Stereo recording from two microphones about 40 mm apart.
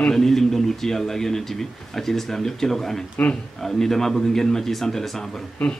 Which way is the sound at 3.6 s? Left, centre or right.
Centre.